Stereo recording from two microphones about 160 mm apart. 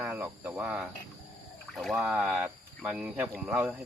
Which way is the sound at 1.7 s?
Centre (ahead or behind).